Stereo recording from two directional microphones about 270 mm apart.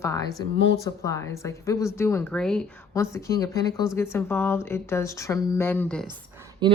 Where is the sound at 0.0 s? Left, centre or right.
Centre.